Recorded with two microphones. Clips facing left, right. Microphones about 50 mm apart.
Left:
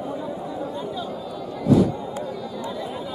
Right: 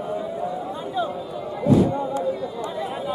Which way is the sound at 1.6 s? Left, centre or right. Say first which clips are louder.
Even; right.